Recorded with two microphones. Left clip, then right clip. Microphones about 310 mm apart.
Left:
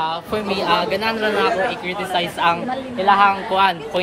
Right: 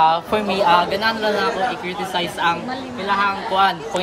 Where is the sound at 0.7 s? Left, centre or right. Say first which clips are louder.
Right 3 dB; centre.